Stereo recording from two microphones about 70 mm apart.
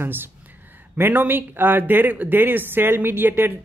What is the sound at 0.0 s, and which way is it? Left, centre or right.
Speech, right.